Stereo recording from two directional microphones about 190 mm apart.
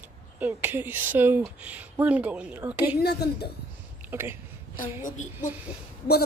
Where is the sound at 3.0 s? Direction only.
60° left (ahead or behind).